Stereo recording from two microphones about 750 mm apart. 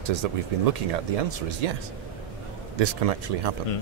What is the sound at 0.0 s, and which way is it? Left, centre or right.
Speech, right.